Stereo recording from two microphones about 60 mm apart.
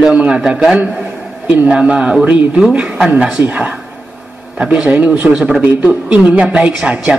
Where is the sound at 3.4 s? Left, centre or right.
Right.